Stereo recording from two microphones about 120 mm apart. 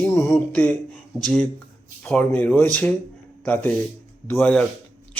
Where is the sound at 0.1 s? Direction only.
25° left (ahead or behind).